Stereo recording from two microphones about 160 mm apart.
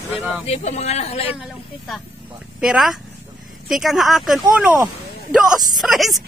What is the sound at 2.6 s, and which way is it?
Speech, 5° right (ahead or behind).